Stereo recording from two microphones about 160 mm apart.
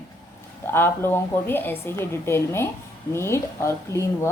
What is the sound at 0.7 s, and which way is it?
A woman's voice, 15° left (ahead or behind).